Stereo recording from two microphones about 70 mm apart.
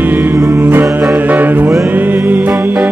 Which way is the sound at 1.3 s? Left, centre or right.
Right.